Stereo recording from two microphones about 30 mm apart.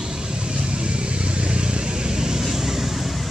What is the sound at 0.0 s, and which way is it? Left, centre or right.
Vehicle, right.